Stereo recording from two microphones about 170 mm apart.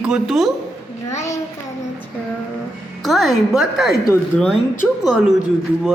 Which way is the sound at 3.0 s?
Centre (ahead or behind).